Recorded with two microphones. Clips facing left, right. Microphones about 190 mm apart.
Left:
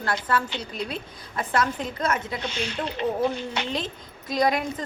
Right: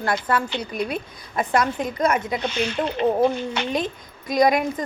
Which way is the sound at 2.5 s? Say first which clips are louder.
Right 6 dB; 55° right (ahead or behind).